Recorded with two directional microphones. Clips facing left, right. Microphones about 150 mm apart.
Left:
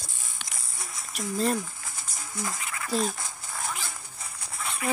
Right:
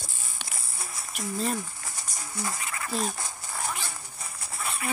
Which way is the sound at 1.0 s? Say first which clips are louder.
Left 3 dB; centre (ahead or behind).